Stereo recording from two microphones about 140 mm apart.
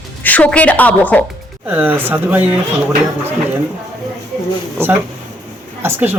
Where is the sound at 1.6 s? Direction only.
15° right (ahead or behind).